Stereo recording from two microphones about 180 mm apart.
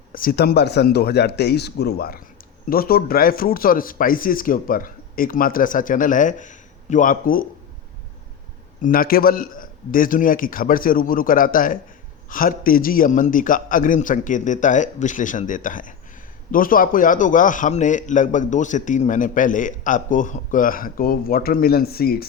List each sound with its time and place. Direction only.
0.1 s a man's voice: 55° left (ahead or behind)
8.8 s a man's voice: 55° left (ahead or behind)